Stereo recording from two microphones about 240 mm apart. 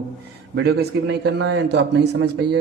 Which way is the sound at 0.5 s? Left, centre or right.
Right.